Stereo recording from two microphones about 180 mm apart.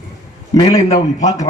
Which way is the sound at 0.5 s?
20° left (ahead or behind).